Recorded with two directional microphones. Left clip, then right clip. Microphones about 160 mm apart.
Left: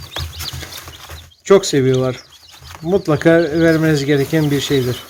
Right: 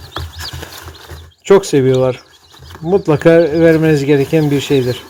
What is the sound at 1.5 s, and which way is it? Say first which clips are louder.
Speech: right 2 dB; centre (ahead or behind).